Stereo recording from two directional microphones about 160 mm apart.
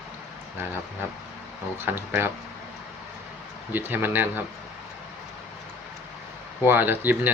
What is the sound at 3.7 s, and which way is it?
Speech, 10° right (ahead or behind).